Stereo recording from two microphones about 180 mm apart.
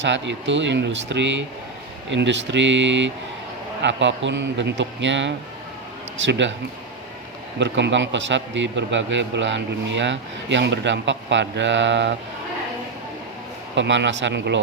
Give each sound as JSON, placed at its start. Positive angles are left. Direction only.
{"t": 0.0, "sound": "a man's voice", "side_deg": -85}
{"t": 7.6, "sound": "a man's voice", "side_deg": -85}
{"t": 13.7, "sound": "a man's voice", "side_deg": -80}